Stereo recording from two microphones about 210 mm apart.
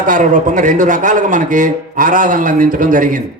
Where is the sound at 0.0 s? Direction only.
40° right (ahead or behind).